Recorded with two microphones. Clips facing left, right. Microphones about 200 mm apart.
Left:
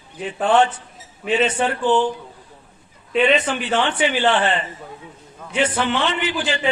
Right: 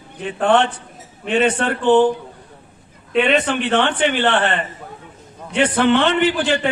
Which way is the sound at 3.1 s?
Centre (ahead or behind).